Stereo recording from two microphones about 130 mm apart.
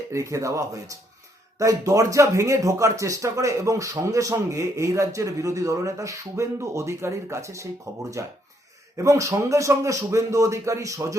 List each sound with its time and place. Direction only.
0.1 s speech: 25° right (ahead or behind)